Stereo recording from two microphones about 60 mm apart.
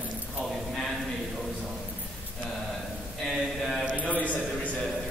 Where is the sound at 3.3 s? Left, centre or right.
Centre.